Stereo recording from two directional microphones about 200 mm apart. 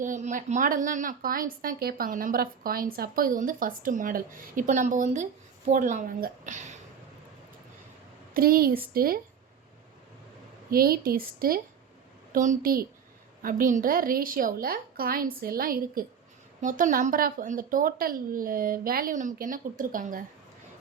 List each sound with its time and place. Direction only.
0.0 s a woman's voice: 40° right (ahead or behind)
8.3 s speech: 45° right (ahead or behind)
10.7 s a woman's voice: 50° right (ahead or behind)